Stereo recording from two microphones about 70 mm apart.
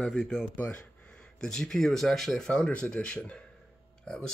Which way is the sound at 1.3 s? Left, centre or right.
Centre.